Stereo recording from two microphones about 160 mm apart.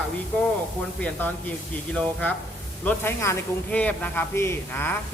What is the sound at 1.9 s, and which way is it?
Speech, 5° left (ahead or behind).